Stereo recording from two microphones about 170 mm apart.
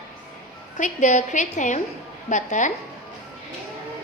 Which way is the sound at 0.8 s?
45° left (ahead or behind).